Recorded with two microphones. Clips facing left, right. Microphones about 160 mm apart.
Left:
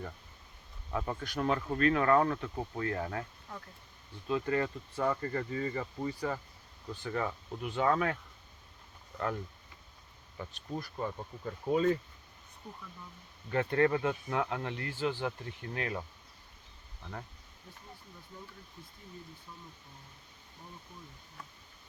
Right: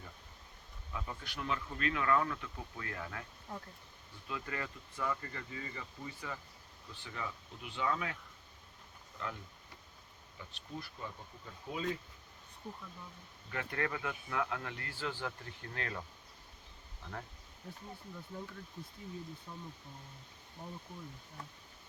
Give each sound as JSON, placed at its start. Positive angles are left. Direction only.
{"t": 0.9, "sound": "speech", "side_deg": 55}
{"t": 3.5, "sound": "speech", "side_deg": -30}
{"t": 4.3, "sound": "speech", "side_deg": 30}
{"t": 9.1, "sound": "speech", "side_deg": 55}
{"t": 13.5, "sound": "speech", "side_deg": 35}
{"t": 18.3, "sound": "speech", "side_deg": -55}